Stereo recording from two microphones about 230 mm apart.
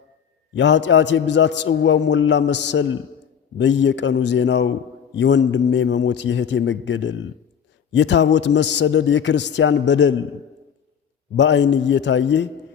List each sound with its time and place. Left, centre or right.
0.5 s a man's voice: left
11.3 s a man's voice: left